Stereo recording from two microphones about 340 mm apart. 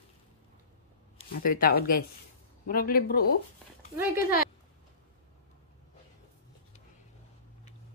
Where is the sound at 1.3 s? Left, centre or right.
Left.